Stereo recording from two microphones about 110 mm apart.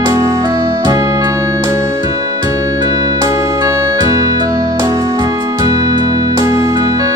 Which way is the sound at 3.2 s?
30° right (ahead or behind).